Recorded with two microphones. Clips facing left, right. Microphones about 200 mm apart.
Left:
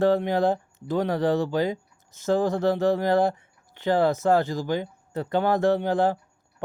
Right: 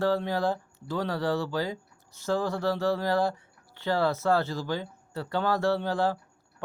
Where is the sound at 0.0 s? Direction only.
20° left (ahead or behind).